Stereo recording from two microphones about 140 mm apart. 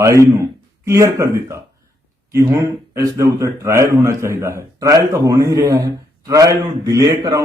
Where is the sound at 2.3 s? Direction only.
20° right (ahead or behind).